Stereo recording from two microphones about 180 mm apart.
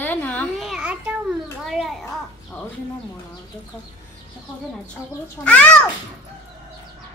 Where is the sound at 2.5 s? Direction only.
15° left (ahead or behind).